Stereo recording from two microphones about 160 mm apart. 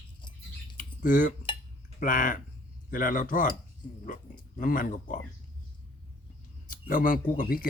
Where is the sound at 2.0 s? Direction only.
55° left (ahead or behind).